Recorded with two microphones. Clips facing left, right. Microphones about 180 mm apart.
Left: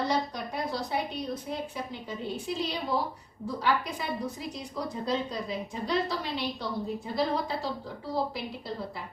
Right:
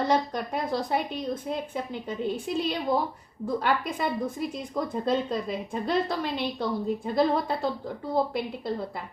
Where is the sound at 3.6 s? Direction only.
50° right (ahead or behind).